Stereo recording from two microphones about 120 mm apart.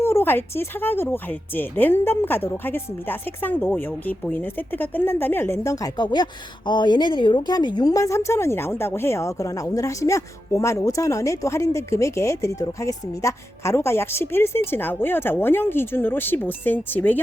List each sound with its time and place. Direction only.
0.0 s speech: 20° left (ahead or behind)